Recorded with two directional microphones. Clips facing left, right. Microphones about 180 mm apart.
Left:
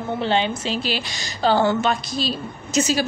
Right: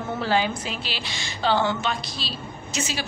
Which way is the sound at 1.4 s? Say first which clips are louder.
Left 5 dB; 40° left (ahead or behind).